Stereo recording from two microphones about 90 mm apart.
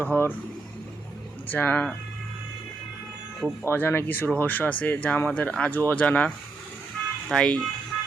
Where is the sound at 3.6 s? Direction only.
25° left (ahead or behind).